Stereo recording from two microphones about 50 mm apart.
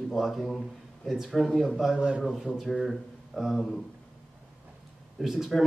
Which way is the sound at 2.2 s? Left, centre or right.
Centre.